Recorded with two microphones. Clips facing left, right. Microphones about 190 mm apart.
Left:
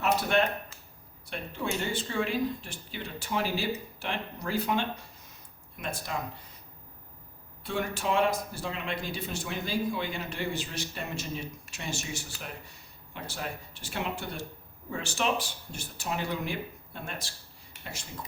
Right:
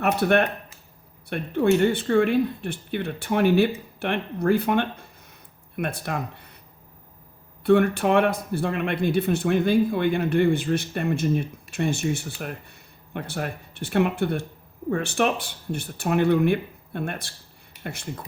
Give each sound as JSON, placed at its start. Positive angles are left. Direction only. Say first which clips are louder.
{"t": 0.0, "sound": "speech", "louder": "right 6 dB", "side_deg": -60}
{"t": 7.6, "sound": "speech", "louder": "right 13 dB", "side_deg": -60}